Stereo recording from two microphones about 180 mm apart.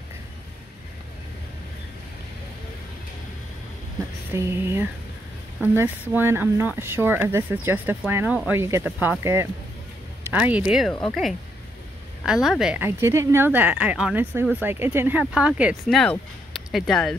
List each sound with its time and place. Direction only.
4.3 s speech: 15° right (ahead or behind)